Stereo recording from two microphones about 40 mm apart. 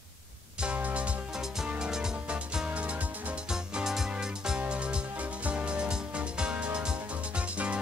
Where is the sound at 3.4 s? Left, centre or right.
Centre.